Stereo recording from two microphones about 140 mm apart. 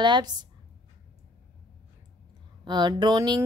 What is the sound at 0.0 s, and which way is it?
Speech, 30° right (ahead or behind).